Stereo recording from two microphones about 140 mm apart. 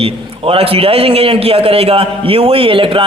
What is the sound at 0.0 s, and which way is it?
A man's voice, 40° right (ahead or behind).